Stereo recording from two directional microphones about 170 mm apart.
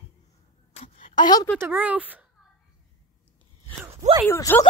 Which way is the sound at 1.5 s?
10° right (ahead or behind).